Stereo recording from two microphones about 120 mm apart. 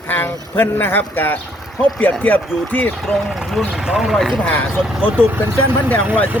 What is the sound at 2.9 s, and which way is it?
Speech, centre (ahead or behind).